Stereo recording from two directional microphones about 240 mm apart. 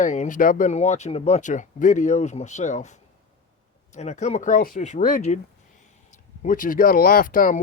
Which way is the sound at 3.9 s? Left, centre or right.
Left.